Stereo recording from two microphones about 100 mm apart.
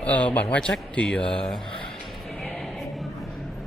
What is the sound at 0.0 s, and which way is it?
A man's voice, 15° left (ahead or behind).